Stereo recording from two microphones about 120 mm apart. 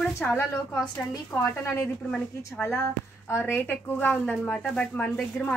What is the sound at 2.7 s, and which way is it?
Speech, 20° left (ahead or behind).